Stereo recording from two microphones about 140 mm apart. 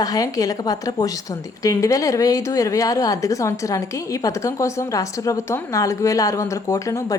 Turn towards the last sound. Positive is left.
turn(degrees=25)  # may be behind; listen again after turning